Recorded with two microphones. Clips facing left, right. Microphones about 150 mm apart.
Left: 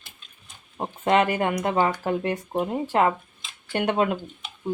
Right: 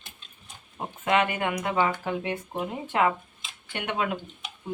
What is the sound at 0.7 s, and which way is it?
Speech, 35° left (ahead or behind).